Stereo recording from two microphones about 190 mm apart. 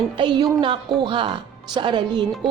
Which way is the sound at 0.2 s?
25° right (ahead or behind).